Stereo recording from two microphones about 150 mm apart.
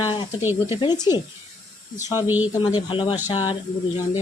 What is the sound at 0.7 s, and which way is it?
Speech, 30° left (ahead or behind).